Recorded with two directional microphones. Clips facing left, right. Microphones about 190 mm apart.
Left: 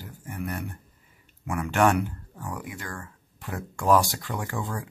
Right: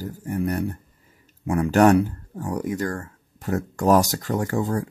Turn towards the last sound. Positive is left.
turn(degrees=-40)  # may be behind; listen again after turning